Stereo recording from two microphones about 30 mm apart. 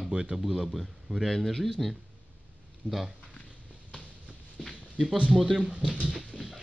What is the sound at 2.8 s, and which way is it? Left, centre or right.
Speech, left.